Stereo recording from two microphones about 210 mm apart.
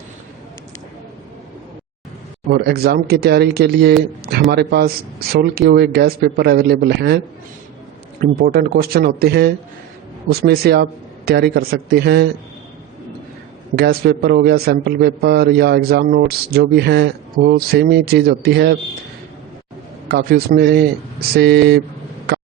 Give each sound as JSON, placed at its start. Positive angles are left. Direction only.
{"t": 2.5, "sound": "a man's voice", "side_deg": -50}
{"t": 8.2, "sound": "a man's voice", "side_deg": -45}
{"t": 13.7, "sound": "a man's voice", "side_deg": -50}
{"t": 20.1, "sound": "a man's voice", "side_deg": -50}